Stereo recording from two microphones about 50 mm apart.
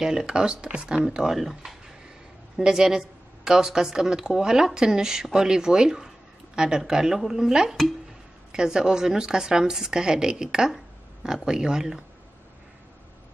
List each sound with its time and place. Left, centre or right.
0.0 s a woman's voice: centre